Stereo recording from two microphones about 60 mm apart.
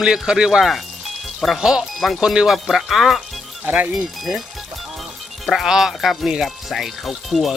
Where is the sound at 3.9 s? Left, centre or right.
Centre.